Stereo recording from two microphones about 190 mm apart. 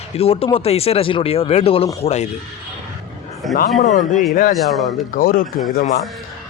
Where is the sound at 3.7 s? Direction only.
40° left (ahead or behind).